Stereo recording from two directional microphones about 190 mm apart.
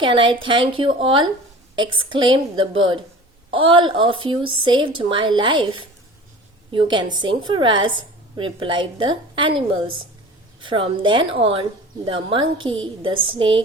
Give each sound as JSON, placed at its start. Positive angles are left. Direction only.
{"t": 0.0, "sound": "a woman's voice", "side_deg": -25}